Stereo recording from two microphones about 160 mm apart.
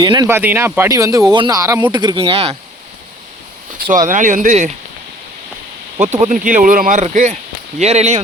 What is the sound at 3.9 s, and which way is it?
Speech, 55° right (ahead or behind).